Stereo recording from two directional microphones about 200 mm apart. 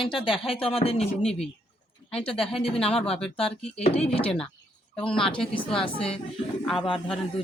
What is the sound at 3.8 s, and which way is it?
Speech, 30° left (ahead or behind).